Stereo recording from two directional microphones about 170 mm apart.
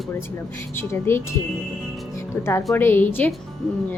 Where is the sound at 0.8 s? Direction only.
15° left (ahead or behind).